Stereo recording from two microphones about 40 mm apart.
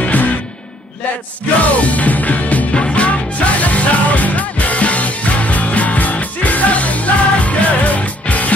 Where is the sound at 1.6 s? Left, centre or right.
Left.